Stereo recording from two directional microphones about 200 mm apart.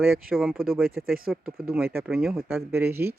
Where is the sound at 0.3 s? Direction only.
Centre (ahead or behind).